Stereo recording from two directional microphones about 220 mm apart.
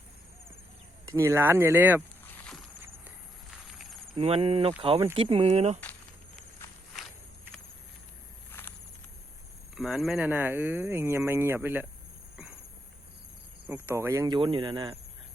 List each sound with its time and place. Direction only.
1.0 s speech: 15° right (ahead or behind)
4.1 s speech: 25° right (ahead or behind)
9.7 s speech: centre (ahead or behind)
13.7 s speech: 10° right (ahead or behind)